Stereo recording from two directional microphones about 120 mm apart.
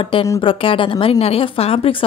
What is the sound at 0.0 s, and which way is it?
A woman's voice, 50° left (ahead or behind).